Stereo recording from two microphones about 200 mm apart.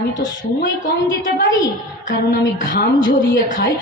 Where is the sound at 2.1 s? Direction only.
45° left (ahead or behind).